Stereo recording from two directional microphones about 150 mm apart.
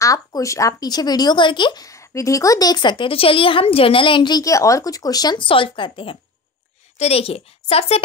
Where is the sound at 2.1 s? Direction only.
20° left (ahead or behind); by 8.0 s 40° left (ahead or behind).